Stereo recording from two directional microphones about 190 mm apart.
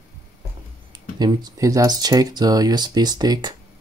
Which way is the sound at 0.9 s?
20° right (ahead or behind).